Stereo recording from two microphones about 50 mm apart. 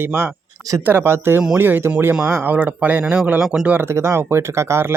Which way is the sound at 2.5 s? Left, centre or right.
Right.